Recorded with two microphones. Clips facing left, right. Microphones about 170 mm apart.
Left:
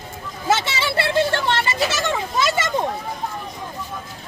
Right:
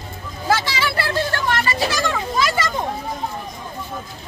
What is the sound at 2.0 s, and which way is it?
Children playing, 20° left (ahead or behind).